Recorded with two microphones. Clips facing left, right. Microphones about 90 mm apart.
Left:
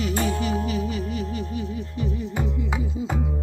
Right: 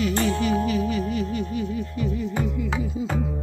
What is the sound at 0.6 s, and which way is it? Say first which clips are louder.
Music: right 3 dB; 40° right (ahead or behind).